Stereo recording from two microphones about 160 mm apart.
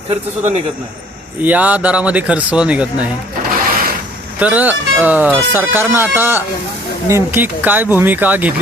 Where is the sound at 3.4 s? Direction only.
65° right (ahead or behind).